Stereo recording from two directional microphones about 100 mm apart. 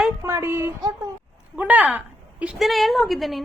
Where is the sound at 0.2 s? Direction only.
30° right (ahead or behind); by 2.6 s 15° right (ahead or behind).